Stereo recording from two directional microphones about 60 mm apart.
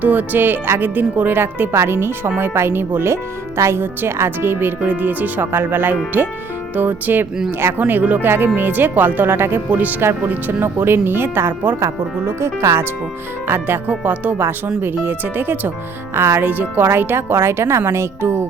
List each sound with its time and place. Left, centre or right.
0.0 s speech: right
1.7 s speech: right
11.8 s speech: right
13.5 s speech: right
16.1 s speech: right
16.4 s speech: right